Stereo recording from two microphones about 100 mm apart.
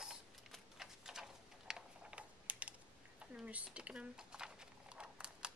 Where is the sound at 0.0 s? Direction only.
5° right (ahead or behind).